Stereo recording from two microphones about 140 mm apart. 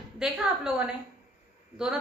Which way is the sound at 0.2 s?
10° right (ahead or behind).